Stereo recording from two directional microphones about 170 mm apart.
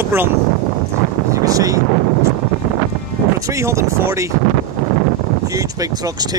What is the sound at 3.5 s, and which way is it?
Speech, 15° right (ahead or behind).